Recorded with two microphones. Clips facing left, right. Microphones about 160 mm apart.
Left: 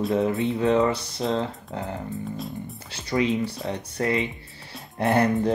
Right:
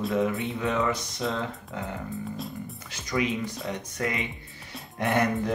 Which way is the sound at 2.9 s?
30° left (ahead or behind).